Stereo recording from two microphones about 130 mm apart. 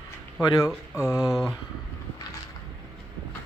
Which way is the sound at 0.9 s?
25° left (ahead or behind).